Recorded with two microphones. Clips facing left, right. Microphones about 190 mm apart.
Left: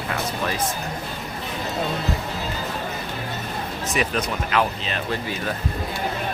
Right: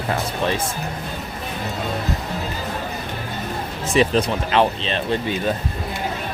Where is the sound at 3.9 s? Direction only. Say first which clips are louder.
Right 7 dB; 30° right (ahead or behind).